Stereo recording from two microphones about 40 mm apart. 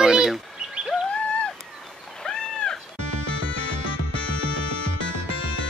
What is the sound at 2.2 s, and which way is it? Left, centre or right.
Cat, centre.